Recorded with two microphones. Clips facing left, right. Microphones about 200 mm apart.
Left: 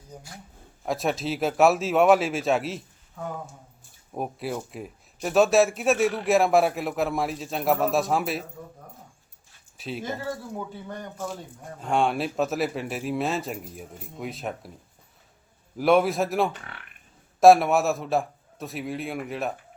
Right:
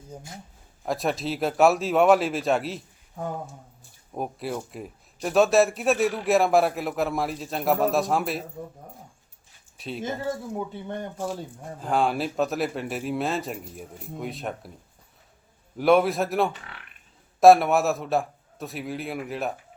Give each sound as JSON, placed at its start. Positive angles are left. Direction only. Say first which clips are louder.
{"t": 0.1, "sound": "speech", "louder": "right 2 dB", "side_deg": -20}
{"t": 0.9, "sound": "speech", "louder": "even", "side_deg": 0}
{"t": 4.1, "sound": "speech", "louder": "even", "side_deg": 0}
{"t": 9.7, "sound": "speech", "louder": "left 1 dB", "side_deg": 0}
{"t": 10.8, "sound": "speech", "louder": "right 3 dB", "side_deg": -25}
{"t": 11.8, "sound": "speech", "louder": "even", "side_deg": 0}
{"t": 15.8, "sound": "speech", "louder": "right 1 dB", "side_deg": 0}